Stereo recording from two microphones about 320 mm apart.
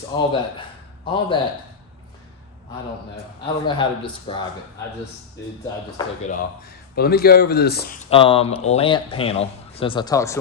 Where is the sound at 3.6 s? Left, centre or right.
Centre.